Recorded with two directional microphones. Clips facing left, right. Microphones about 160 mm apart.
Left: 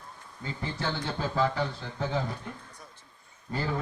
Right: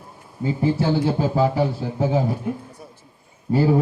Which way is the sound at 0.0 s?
10° right (ahead or behind).